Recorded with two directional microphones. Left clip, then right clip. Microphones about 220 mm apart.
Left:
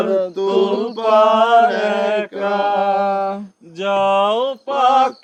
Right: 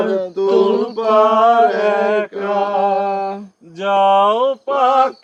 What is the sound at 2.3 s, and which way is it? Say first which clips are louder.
Mantra: even; 45° left (ahead or behind).